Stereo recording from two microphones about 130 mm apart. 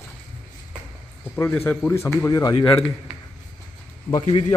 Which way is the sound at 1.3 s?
15° left (ahead or behind).